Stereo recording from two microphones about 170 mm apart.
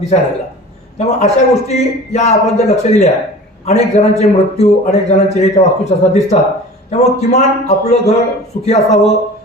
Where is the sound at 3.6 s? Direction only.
40° left (ahead or behind).